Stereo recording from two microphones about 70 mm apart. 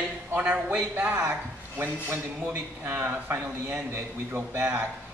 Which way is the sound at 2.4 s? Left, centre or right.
Right.